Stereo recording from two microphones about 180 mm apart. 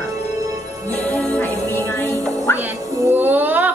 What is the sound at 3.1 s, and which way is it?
Music, 10° right (ahead or behind).